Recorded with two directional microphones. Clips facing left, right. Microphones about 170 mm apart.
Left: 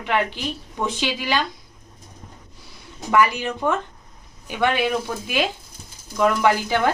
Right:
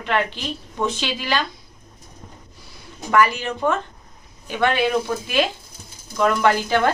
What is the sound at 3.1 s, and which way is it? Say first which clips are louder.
A woman's voice: even; 15° left (ahead or behind).